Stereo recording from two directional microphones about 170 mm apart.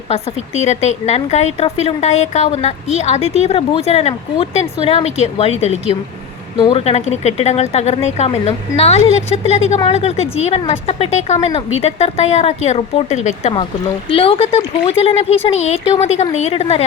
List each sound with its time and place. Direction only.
0.1 s a woman's voice: 40° left (ahead or behind)